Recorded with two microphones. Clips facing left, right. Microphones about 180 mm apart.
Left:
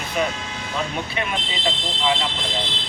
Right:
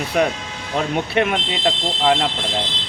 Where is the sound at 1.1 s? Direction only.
65° right (ahead or behind).